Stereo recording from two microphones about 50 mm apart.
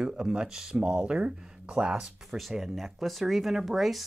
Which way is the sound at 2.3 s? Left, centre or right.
Centre.